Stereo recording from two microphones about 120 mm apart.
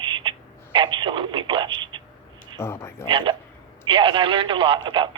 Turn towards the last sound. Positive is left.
turn(degrees=-40)  # may be behind; listen again after turning